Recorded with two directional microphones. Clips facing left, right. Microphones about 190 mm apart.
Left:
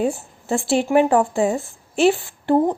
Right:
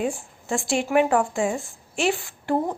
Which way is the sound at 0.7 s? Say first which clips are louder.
Left 4 dB; 35° left (ahead or behind).